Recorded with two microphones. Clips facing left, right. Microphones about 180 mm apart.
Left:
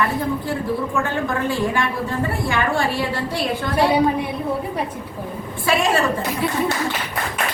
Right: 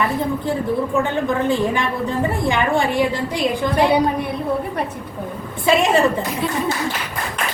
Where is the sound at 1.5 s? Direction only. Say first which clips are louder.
Right 2 dB; 20° right (ahead or behind).